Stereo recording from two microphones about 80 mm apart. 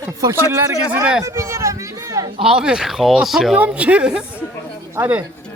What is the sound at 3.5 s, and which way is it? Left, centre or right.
Speech, centre.